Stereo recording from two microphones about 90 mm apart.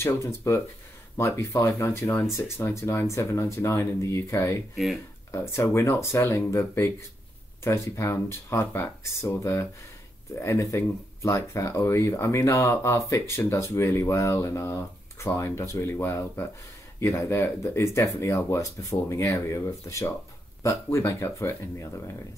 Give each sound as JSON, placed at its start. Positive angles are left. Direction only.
{"t": 0.0, "sound": "speech", "side_deg": 30}